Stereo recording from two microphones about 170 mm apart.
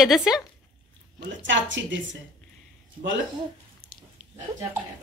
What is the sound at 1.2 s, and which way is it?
Speech, 90° right.